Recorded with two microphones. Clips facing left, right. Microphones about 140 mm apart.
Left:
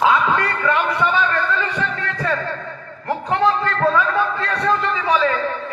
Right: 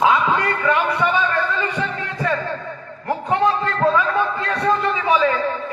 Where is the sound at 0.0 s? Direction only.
15° right (ahead or behind).